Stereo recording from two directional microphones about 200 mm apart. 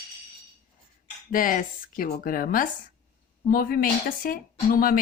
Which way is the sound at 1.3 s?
45° left (ahead or behind).